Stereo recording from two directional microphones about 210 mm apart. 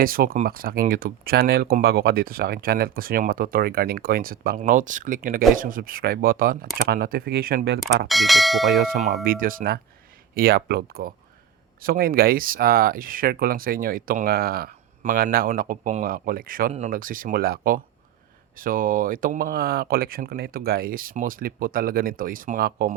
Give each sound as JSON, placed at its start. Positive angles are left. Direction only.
{"t": 0.0, "sound": "speech", "side_deg": -45}
{"t": 8.0, "sound": "bell", "side_deg": 0}
{"t": 8.8, "sound": "speech", "side_deg": -45}